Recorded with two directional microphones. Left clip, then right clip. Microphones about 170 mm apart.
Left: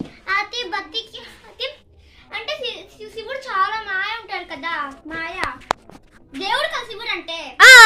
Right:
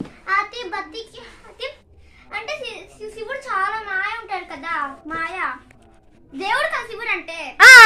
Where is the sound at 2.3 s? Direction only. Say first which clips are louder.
Left 2 dB; 15° right (ahead or behind).